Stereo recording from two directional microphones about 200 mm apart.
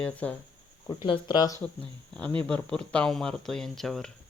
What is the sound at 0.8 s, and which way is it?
Speech, 20° left (ahead or behind).